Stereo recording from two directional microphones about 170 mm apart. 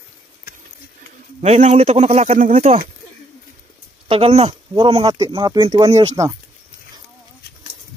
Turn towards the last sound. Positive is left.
turn(degrees=-25)  # may be behind; listen again after turning